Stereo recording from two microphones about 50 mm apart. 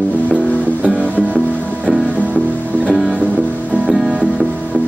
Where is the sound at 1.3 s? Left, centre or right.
Centre.